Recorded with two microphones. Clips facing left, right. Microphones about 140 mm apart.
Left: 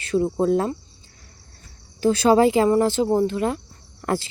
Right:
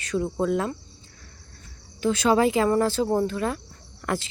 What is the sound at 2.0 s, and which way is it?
Speech, 35° left (ahead or behind).